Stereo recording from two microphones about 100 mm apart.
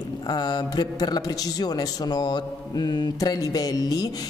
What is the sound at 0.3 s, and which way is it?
Speech, 45° left (ahead or behind).